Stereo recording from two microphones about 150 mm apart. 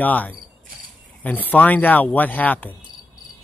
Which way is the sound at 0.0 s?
10° left (ahead or behind).